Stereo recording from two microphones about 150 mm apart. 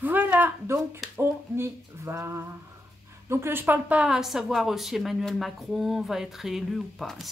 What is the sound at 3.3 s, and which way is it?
Speech, 15° right (ahead or behind).